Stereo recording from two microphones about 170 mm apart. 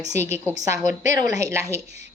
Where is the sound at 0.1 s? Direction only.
15° right (ahead or behind).